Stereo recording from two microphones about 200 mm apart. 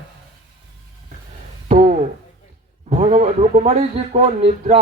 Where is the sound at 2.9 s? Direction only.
35° right (ahead or behind).